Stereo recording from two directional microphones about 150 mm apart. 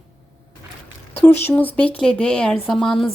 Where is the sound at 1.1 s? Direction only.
15° left (ahead or behind).